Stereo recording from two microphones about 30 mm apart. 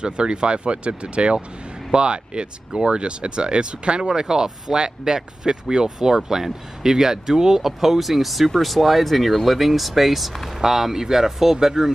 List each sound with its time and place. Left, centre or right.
0.0 s speech: right
4.1 s speech: centre
7.6 s speech: centre